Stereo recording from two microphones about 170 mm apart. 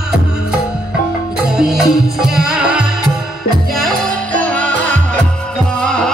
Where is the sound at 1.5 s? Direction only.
5° right (ahead or behind).